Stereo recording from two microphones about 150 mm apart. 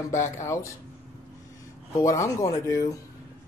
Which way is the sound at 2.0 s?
20° left (ahead or behind).